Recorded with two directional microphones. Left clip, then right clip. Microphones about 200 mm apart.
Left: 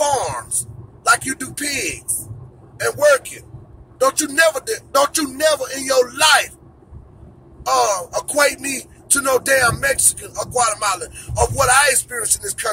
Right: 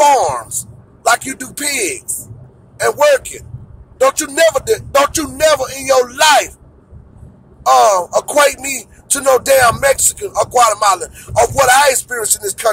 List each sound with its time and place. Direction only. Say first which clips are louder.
0.2 s a man's voice: right 8 dB; 30° right (ahead or behind)
2.8 s music: right 4 dB; 30° right (ahead or behind)
7.6 s speech: right 8 dB; 30° right (ahead or behind)